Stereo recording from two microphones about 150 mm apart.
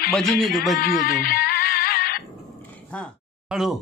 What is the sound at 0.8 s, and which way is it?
Music, 90° left.